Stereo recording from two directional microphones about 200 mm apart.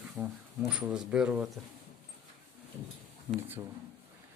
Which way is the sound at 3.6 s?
15° right (ahead or behind).